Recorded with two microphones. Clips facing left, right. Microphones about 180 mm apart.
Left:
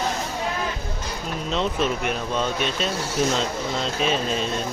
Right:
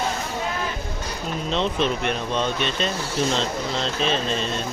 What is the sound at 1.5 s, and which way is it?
Speech, 5° left (ahead or behind).